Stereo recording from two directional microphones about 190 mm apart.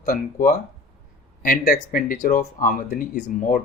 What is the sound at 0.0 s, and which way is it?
Speech, 45° left (ahead or behind).